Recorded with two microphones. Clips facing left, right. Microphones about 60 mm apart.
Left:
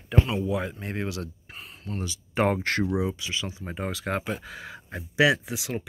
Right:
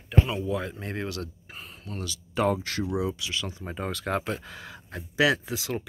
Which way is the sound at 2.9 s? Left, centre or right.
Left.